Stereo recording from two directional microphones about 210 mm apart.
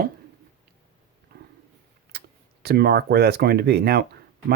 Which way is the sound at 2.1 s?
50° right (ahead or behind).